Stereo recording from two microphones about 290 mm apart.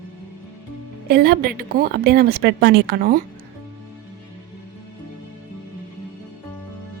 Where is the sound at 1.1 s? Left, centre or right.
Right.